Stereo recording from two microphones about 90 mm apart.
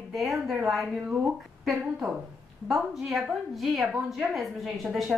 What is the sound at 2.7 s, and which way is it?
A woman's voice, centre (ahead or behind).